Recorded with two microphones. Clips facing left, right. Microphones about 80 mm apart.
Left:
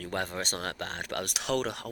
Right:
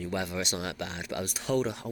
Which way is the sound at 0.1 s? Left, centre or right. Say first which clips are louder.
Left 1 dB; left.